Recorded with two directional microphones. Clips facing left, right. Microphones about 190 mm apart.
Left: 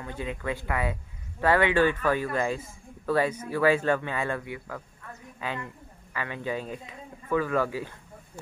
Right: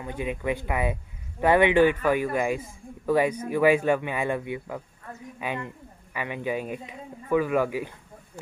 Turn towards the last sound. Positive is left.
turn(degrees=-15)  # may be behind; listen again after turning